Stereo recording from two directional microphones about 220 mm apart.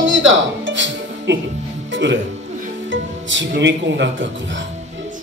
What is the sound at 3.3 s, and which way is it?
Speech, 55° right (ahead or behind).